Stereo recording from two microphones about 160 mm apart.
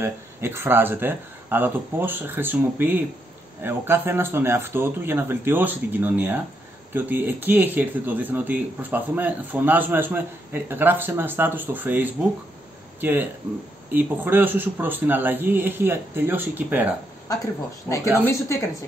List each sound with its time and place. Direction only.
0.0 s speech: 15° right (ahead or behind)
17.3 s a woman's voice: 20° left (ahead or behind)